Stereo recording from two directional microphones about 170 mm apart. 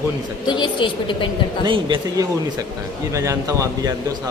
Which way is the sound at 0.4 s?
25° left (ahead or behind).